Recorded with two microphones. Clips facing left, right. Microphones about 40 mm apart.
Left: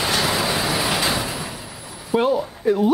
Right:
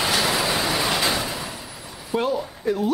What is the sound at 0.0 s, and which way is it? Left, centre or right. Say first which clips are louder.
Vehicle: left 1 dB; centre.